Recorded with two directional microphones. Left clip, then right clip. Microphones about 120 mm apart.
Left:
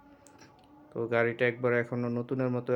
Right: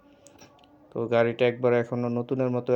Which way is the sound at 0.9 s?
30° right (ahead or behind).